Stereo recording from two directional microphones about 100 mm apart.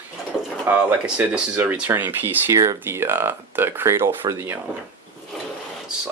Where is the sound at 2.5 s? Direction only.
30° right (ahead or behind).